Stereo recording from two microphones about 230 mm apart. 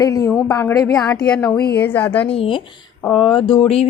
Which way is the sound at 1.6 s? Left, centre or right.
Left.